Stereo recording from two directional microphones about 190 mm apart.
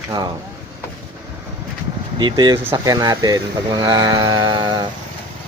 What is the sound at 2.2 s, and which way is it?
Mantra, 25° right (ahead or behind).